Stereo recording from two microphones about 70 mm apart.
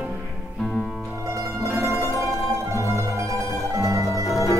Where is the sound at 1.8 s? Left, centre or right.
Right.